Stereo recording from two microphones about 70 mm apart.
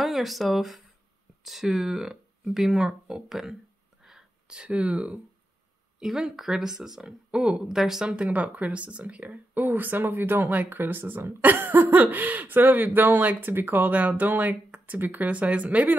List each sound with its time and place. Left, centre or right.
0.0 s speech: centre
4.0 s a sound: centre
5.9 s speech: centre
8.1 s speech: centre